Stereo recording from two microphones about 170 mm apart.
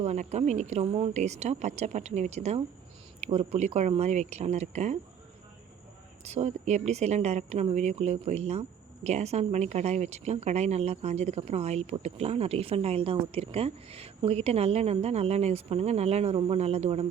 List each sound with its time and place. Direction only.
0.0 s speech: 40° right (ahead or behind)
6.2 s speech: 40° right (ahead or behind)